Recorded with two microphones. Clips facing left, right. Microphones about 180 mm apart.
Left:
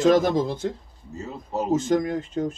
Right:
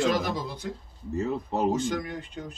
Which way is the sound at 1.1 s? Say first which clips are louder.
Right 5 dB; 65° right (ahead or behind).